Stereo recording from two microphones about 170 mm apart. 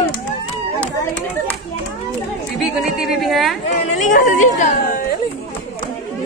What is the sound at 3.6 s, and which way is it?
Speech, 45° left (ahead or behind).